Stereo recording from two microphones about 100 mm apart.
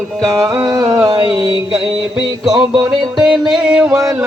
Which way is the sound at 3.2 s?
5° right (ahead or behind).